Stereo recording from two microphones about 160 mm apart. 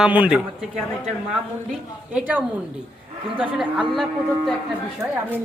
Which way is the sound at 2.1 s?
10° right (ahead or behind).